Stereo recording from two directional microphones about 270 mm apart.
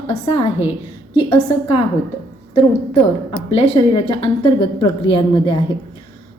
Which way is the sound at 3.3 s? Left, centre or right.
Centre.